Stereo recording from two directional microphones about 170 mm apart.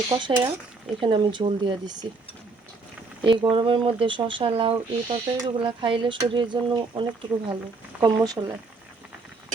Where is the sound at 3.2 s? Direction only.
30° right (ahead or behind).